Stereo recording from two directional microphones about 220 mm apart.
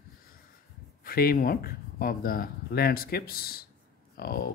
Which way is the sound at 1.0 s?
40° left (ahead or behind).